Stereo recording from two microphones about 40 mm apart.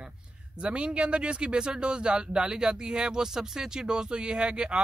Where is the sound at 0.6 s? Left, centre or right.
Right.